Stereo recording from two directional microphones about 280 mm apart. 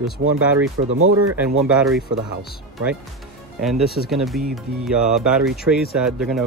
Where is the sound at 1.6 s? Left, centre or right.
Centre.